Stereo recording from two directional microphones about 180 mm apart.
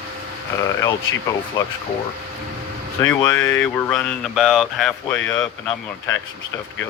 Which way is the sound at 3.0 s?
20° left (ahead or behind).